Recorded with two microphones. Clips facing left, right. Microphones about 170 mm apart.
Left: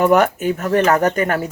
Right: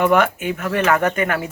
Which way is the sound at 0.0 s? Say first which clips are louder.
Left 3 dB; 40° left (ahead or behind).